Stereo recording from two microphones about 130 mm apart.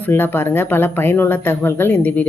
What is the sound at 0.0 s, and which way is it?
Speech, 15° left (ahead or behind).